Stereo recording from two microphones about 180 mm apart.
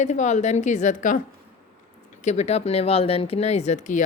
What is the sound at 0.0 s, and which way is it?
Speech, 40° left (ahead or behind).